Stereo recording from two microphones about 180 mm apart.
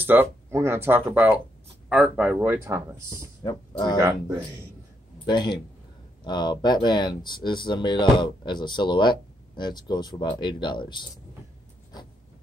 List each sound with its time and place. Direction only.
0.0 s speech: 10° right (ahead or behind)
3.4 s speech: 25° left (ahead or behind)
4.0 s speech: 15° right (ahead or behind)
5.3 s speech: 25° left (ahead or behind)